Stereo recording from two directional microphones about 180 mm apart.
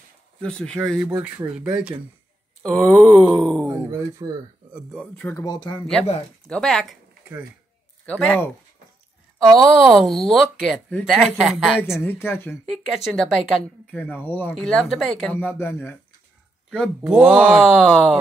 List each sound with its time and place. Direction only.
0.4 s speech: 5° left (ahead or behind)
3.6 s speech: 15° right (ahead or behind)
4.7 s speech: 5° left (ahead or behind)
5.4 s speech: 25° left (ahead or behind)
6.4 s speech: 5° left (ahead or behind)
8.0 s speech: 10° left (ahead or behind)
9.6 s speech: centre (ahead or behind)
12.0 s speech: 10° left (ahead or behind)
12.6 s speech: centre (ahead or behind)
13.9 s speech: 10° left (ahead or behind)
15.3 s speech: 10° left (ahead or behind)
16.7 s speech: centre (ahead or behind)